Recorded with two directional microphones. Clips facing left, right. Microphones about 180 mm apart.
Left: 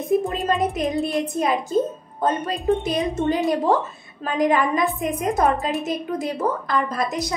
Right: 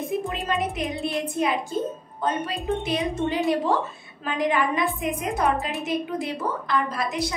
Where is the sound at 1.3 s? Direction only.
40° left (ahead or behind).